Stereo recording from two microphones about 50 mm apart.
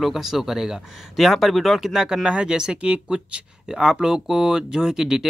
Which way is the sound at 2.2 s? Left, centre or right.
Centre.